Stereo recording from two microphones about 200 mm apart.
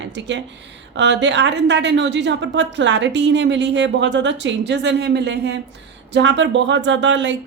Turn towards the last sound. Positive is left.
turn(degrees=-65)  # may be behind; listen again after turning